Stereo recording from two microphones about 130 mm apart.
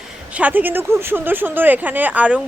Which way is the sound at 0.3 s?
15° right (ahead or behind).